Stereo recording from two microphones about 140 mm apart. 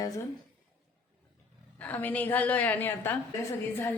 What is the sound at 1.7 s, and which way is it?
A woman's voice, 10° left (ahead or behind).